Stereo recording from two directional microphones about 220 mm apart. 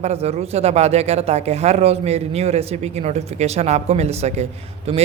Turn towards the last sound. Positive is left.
turn(degrees=-30)  # may be behind; listen again after turning